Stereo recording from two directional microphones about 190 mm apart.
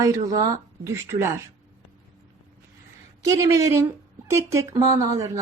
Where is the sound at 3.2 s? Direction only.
15° right (ahead or behind).